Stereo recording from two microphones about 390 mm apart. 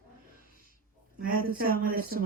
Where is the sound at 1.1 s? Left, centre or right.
Right.